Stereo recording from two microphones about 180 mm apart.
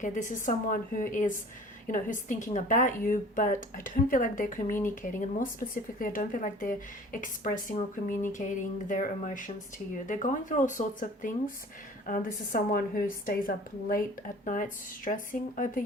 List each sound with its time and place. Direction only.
0.0 s a woman's voice: 45° left (ahead or behind)